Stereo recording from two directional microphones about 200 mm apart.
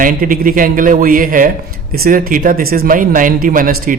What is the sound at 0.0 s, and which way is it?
A man's voice, 45° right (ahead or behind).